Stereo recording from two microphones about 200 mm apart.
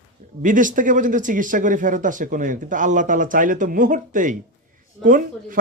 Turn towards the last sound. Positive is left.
turn(degrees=-40)  # may be behind; listen again after turning